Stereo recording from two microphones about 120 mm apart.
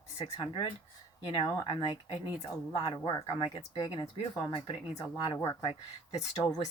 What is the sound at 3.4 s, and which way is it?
A woman's voice, 50° left (ahead or behind).